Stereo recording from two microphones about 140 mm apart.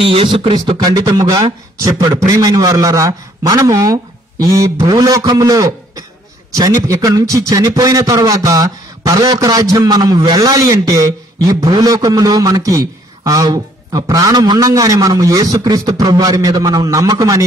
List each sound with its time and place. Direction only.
0.0 s speech: 40° right (ahead or behind)
0.8 s a man's voice: 25° right (ahead or behind)